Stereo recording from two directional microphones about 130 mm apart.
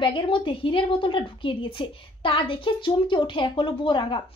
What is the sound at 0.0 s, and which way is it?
A woman's voice, 40° left (ahead or behind).